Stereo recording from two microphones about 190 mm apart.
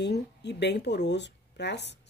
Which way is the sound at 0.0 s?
65° left (ahead or behind).